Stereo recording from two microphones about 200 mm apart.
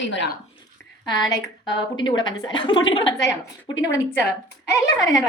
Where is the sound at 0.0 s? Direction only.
65° left (ahead or behind).